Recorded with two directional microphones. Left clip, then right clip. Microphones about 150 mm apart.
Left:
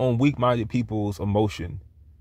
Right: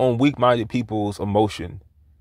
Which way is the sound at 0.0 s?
20° right (ahead or behind).